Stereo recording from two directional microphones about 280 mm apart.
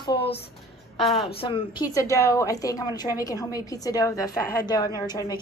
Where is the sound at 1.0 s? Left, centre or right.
Centre.